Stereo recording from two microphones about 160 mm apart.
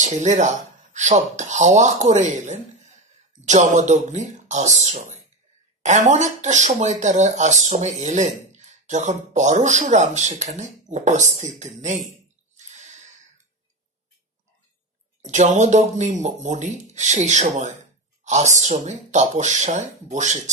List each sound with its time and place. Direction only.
0.0 s speech: 50° right (ahead or behind)
12.5 s a sound: 50° right (ahead or behind)
15.2 s speech: 50° right (ahead or behind)